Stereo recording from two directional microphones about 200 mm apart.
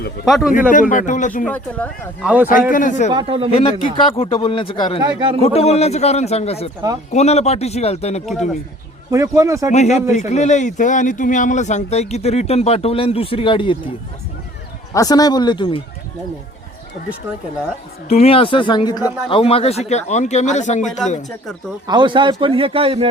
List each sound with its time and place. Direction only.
0.3 s speech: centre (ahead or behind)
0.7 s speech: 40° left (ahead or behind)
1.5 s speech: 5° left (ahead or behind)
2.2 s speech: 10° right (ahead or behind)
2.5 s speech: 40° left (ahead or behind)
3.1 s a man's voice: 25° right (ahead or behind)
3.5 s speech: 30° left (ahead or behind)
4.9 s a man's voice: 25° right (ahead or behind)
5.4 s speech: 30° left (ahead or behind)
9.0 s speech: 15° right (ahead or behind)
9.6 s speech: 35° left (ahead or behind)
14.9 s speech: 20° left (ahead or behind)
18.1 s speech: 30° left (ahead or behind)
21.8 s a man's voice: 25° right (ahead or behind)